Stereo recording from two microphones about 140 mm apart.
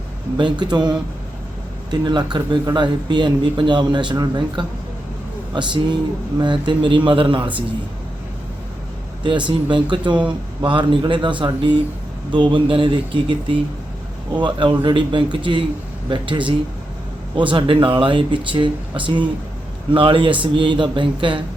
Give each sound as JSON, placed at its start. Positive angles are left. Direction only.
{"t": 0.3, "sound": "speech", "side_deg": -35}
{"t": 9.2, "sound": "speech", "side_deg": -35}
{"t": 14.8, "sound": "speech", "side_deg": -35}